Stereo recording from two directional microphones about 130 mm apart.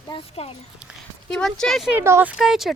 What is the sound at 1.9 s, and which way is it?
Speech, 20° right (ahead or behind).